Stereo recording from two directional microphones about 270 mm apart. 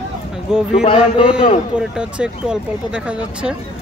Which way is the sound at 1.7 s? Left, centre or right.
Centre.